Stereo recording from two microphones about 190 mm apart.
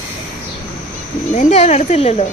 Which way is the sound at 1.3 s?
35° left (ahead or behind).